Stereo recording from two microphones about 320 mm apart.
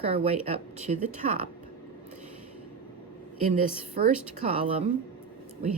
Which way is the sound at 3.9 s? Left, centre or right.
Right.